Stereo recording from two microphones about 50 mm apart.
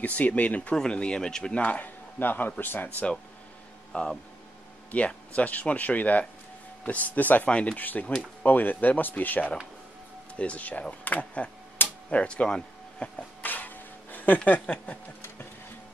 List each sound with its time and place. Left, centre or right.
0.0 s speech: left
0.7 s speech: centre
1.6 s speech: left
2.1 s speech: left
3.9 s speech: left
7.4 s speech: left
7.8 s speech: left
12.4 s speech: centre
13.4 s a sound: left